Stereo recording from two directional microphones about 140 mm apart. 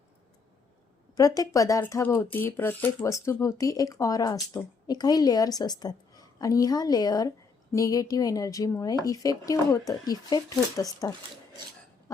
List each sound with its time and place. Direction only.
1.1 s speech: 25° left (ahead or behind)